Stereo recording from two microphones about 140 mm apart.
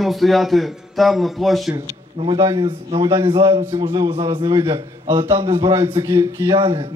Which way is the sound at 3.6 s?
20° right (ahead or behind).